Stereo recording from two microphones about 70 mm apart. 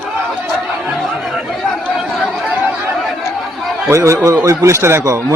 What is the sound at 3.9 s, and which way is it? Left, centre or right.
Speech, right.